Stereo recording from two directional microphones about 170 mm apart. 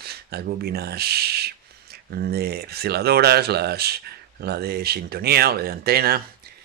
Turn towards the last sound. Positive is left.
turn(degrees=-65)  # may be behind; listen again after turning